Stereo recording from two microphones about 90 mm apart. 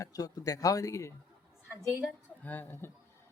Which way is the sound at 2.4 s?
20° left (ahead or behind).